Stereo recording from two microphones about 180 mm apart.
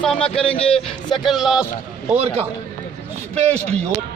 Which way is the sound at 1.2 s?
Centre (ahead or behind).